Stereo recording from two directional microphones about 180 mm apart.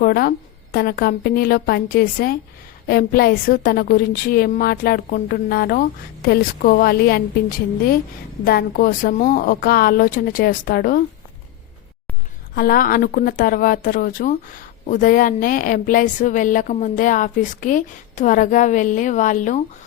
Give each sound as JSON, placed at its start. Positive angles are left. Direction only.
{"t": 0.0, "sound": "a woman's voice", "side_deg": 55}
{"t": 8.4, "sound": "speech", "side_deg": 55}
{"t": 12.5, "sound": "speech", "side_deg": 50}